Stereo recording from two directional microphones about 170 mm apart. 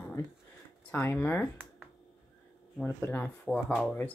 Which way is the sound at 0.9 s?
15° left (ahead or behind).